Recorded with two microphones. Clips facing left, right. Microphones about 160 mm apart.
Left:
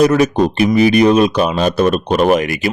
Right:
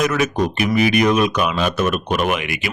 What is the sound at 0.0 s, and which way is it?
Speech, 35° left (ahead or behind).